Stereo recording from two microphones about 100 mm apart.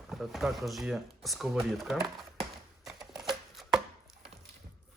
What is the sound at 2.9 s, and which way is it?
Chopping, 5° right (ahead or behind).